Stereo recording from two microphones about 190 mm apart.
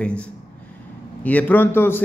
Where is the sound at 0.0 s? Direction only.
5° left (ahead or behind).